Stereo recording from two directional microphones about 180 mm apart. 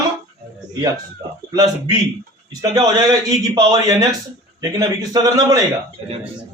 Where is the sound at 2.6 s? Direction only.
20° right (ahead or behind).